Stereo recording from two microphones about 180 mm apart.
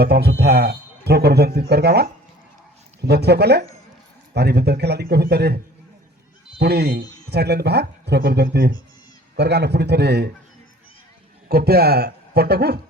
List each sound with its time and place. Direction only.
0.0 s speech: 65° right (ahead or behind)
3.1 s speech: 65° right (ahead or behind)
6.6 s speech: 65° right (ahead or behind)
11.4 s a man's voice: 60° right (ahead or behind)